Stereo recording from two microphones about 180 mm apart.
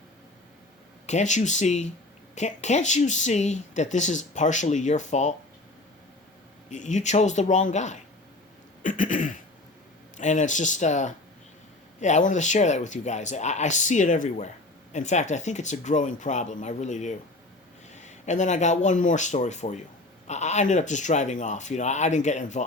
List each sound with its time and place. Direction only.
1.0 s speech: 40° left (ahead or behind)
6.7 s speech: 40° left (ahead or behind)
8.8 s a sound: 45° left (ahead or behind)
10.2 s speech: 40° left (ahead or behind)